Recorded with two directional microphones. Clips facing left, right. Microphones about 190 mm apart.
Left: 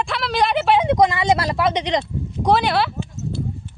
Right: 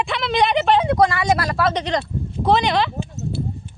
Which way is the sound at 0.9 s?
20° left (ahead or behind).